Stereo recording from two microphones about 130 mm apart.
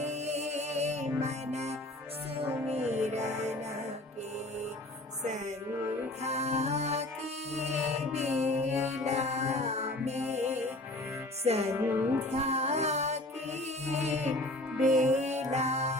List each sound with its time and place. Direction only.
0.0 s music: 60° right (ahead or behind)
6.2 s music: 55° right (ahead or behind)
11.7 s music: 15° right (ahead or behind)
12.3 s music: 55° right (ahead or behind)